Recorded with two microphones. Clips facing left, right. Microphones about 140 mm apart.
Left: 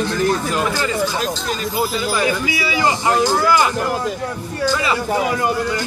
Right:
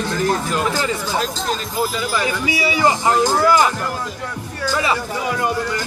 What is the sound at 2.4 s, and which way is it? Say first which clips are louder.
Speech: right 2 dB; 25° right (ahead or behind).